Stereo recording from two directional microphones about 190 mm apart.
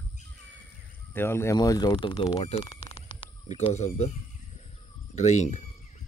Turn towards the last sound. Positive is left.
turn(degrees=40)  # may be behind; listen again after turning